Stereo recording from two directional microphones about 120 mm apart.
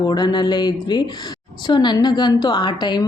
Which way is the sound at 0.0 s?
35° left (ahead or behind).